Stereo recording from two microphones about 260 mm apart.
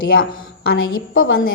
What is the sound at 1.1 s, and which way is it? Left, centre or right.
Speech, left.